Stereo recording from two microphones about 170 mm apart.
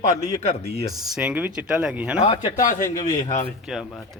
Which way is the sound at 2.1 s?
35° left (ahead or behind).